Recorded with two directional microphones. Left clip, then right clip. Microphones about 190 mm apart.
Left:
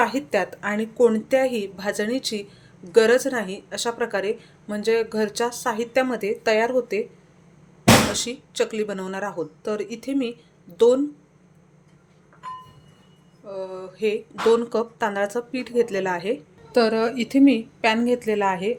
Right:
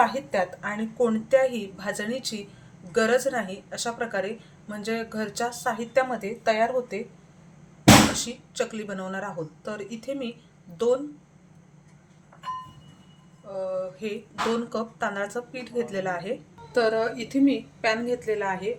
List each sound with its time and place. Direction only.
0.0 s a woman's voice: 55° left (ahead or behind)
8.1 s a woman's voice: 45° left (ahead or behind)
14.0 s a woman's voice: 45° left (ahead or behind)